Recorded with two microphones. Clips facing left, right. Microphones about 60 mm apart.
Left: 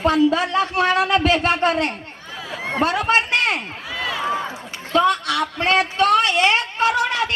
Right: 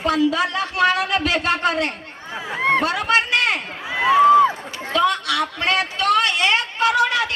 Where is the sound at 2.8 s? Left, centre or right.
Left.